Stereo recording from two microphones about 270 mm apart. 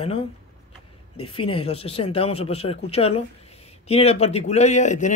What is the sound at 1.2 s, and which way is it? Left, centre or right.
Speech, centre.